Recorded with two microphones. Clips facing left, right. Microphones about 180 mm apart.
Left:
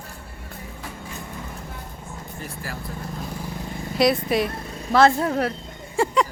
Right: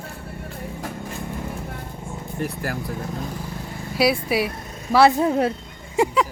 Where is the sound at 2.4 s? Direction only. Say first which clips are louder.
Right 9 dB; 65° right (ahead or behind).